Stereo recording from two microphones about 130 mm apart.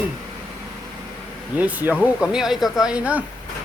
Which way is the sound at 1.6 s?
15° right (ahead or behind).